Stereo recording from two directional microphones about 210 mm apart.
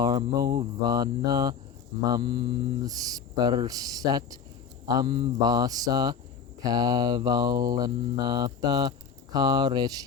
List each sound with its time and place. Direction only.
0.0 s speech: 20° right (ahead or behind)
4.9 s mantra: 20° right (ahead or behind)